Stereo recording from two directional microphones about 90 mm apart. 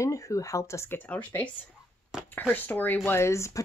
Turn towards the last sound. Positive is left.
turn(degrees=30)  # may be behind; listen again after turning